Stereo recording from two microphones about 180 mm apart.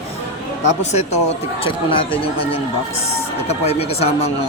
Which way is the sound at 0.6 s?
40° left (ahead or behind).